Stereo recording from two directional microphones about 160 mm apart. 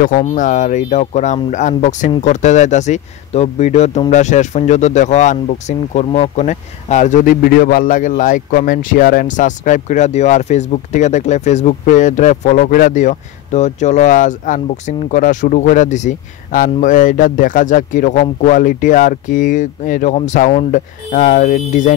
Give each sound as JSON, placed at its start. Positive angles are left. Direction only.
{"t": 0.0, "sound": "speech", "side_deg": 50}